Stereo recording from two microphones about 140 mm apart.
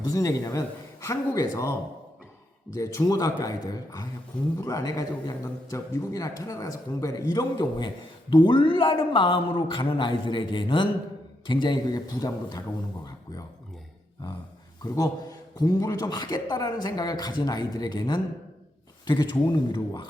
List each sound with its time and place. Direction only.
0.0 s a man's voice: 25° left (ahead or behind)
2.7 s a man's voice: 20° left (ahead or behind)
14.9 s a man's voice: 25° left (ahead or behind)